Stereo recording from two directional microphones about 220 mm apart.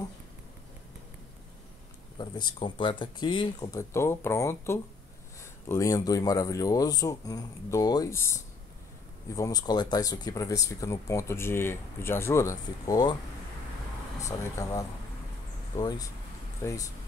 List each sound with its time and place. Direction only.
2.1 s speech: 20° left (ahead or behind)
14.2 s speech: 15° left (ahead or behind)